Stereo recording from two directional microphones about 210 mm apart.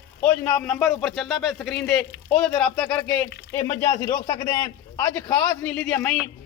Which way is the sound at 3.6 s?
15° left (ahead or behind).